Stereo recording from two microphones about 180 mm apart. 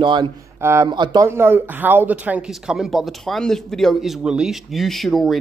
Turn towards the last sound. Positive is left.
turn(degrees=0)  # may be behind; listen again after turning